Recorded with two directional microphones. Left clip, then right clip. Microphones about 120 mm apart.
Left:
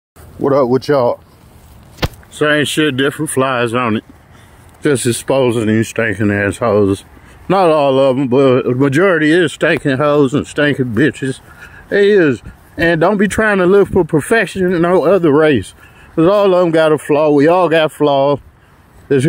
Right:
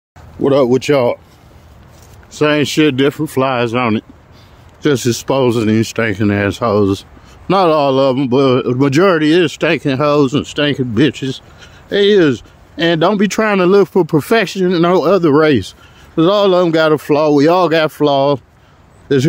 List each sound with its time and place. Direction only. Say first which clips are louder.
0.4 s speech: right 1 dB; 20° right (ahead or behind)
2.3 s speech: right 1 dB; 40° right (ahead or behind)
2.9 s speech: right 1 dB; 20° right (ahead or behind)
4.8 s speech: even; centre (ahead or behind)
5.2 s speech: left 1 dB; 20° right (ahead or behind)
5.8 s speech: even; 10° right (ahead or behind)
9.3 s speech: even; centre (ahead or behind)
10.1 s speech: left 1 dB; 10° left (ahead or behind)
11.0 s speech: even; 5° right (ahead or behind)
13.4 s speech: even; 10° right (ahead or behind)
18.0 s speech: even; 10° right (ahead or behind)